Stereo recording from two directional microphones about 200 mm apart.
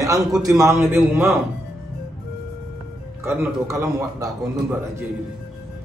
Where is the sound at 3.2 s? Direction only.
10° right (ahead or behind).